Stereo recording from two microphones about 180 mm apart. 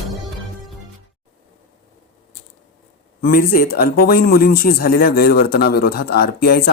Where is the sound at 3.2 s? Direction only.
55° left (ahead or behind).